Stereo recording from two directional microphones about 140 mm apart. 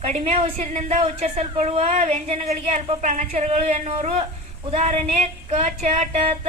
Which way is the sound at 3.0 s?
60° right (ahead or behind).